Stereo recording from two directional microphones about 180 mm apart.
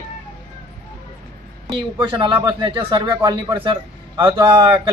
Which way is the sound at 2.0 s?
25° right (ahead or behind).